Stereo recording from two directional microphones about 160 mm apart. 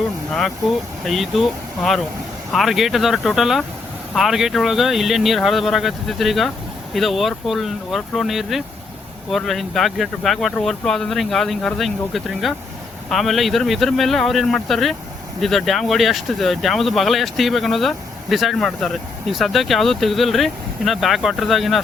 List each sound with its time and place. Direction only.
0.3 s speech: centre (ahead or behind)